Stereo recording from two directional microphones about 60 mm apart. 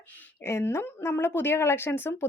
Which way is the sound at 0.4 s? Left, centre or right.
Left.